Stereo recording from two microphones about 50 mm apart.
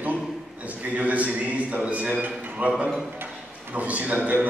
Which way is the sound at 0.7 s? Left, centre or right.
Right.